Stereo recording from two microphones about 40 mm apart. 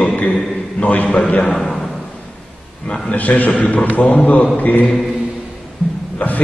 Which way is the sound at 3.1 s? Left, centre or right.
Left.